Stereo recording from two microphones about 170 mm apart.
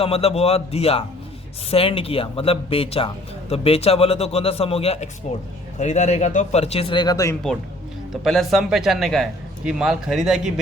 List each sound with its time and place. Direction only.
0.0 s speech: 35° left (ahead or behind)
8.1 s speech: centre (ahead or behind)